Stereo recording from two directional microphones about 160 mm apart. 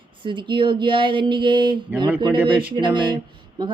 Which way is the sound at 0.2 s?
30° right (ahead or behind).